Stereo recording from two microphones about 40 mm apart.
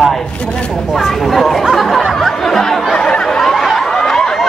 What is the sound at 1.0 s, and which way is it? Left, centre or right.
Chatter, centre.